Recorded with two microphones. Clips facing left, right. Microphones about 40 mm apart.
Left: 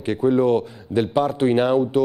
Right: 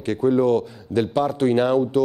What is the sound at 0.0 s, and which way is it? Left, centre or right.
Didgeridoo, centre.